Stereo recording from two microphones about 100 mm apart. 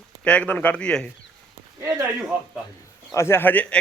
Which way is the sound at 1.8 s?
30° right (ahead or behind).